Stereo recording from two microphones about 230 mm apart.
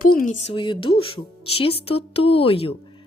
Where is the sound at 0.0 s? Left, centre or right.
Left.